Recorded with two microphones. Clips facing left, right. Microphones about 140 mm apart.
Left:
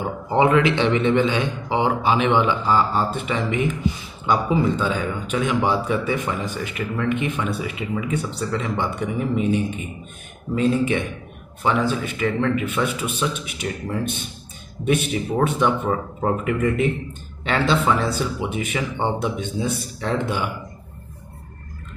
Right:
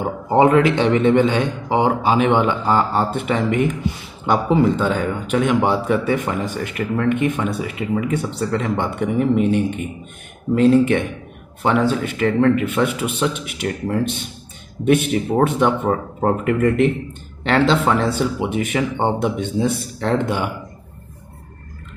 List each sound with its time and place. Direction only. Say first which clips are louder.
0.0 s a man's voice: right 4 dB; 45° right (ahead or behind)